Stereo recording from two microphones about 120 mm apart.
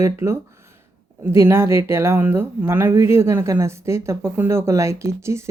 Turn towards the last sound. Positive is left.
turn(degrees=-25)  # may be behind; listen again after turning